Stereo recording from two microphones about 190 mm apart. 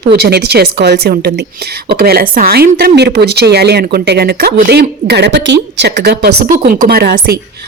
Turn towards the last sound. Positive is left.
turn(degrees=-55)  # may be behind; listen again after turning